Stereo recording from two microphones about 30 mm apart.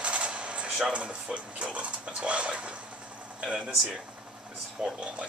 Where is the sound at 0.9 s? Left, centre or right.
Right.